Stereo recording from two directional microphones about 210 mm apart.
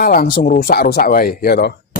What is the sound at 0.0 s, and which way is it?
Speech, 45° left (ahead or behind).